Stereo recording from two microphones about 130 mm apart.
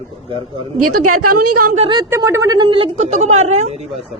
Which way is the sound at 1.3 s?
90° right.